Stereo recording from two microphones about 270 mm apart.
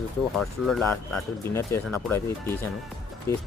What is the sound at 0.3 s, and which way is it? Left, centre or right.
Speech, centre.